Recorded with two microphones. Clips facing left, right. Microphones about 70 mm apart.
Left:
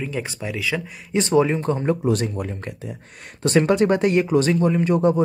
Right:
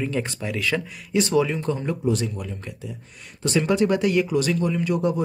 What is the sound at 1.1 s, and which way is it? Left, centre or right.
Speech, left.